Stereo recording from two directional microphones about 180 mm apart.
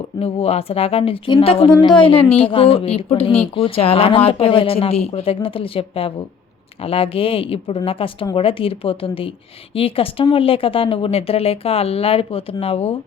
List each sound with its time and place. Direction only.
0.2 s a woman's voice: 35° left (ahead or behind)